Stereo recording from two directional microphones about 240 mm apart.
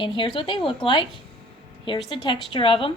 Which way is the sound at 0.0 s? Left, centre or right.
Left.